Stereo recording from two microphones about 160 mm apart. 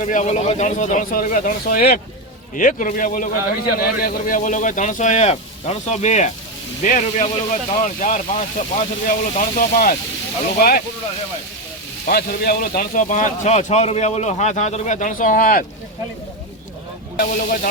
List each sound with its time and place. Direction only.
0.0 s speech: 50° left (ahead or behind); by 2.0 s 70° left (ahead or behind)
2.6 s a man's voice: 55° left (ahead or behind)
12.0 s speech: 65° left (ahead or behind)
17.2 s a man's voice: 65° left (ahead or behind)